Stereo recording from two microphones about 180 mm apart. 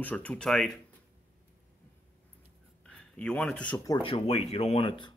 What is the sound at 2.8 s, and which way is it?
Speech, 5° left (ahead or behind).